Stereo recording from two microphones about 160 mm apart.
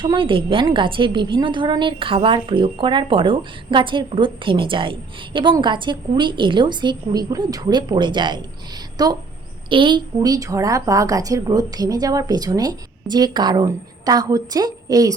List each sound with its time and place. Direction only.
0.0 s a woman's voice: 30° right (ahead or behind)